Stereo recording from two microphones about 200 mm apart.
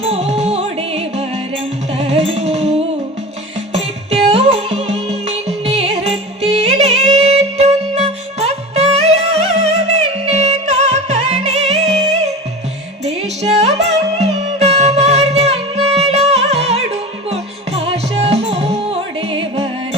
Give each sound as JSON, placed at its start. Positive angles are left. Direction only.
{"t": 0.0, "sound": "music", "side_deg": -30}